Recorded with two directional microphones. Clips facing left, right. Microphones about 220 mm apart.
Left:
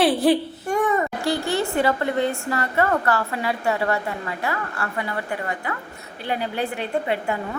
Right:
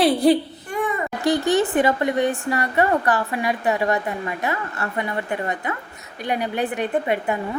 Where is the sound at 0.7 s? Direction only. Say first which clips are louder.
Left 4 dB; 45° left (ahead or behind).